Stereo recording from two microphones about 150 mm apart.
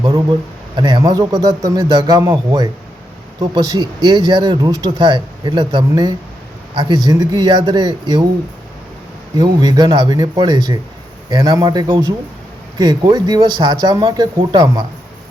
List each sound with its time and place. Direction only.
0.0 s a man's voice: 35° right (ahead or behind)
9.3 s a man's voice: 25° right (ahead or behind)